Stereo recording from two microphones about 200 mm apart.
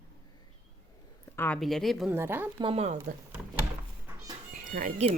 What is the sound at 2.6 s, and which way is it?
Speech, 30° right (ahead or behind).